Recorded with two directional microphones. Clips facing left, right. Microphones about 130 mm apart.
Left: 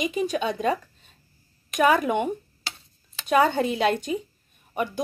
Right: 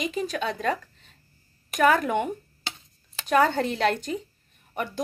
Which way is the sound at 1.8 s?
15° left (ahead or behind).